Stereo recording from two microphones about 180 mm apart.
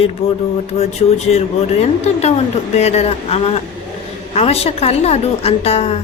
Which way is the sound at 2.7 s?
35° left (ahead or behind).